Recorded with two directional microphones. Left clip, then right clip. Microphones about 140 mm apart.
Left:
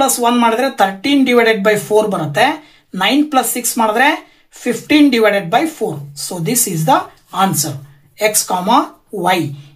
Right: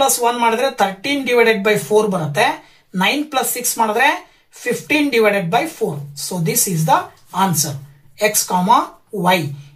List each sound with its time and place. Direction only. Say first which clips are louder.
0.2 s speech: left 2 dB; 50° left (ahead or behind)